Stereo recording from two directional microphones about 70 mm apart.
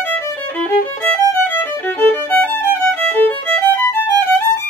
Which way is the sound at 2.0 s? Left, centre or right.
Left.